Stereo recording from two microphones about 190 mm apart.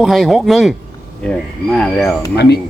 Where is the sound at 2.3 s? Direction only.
60° left (ahead or behind).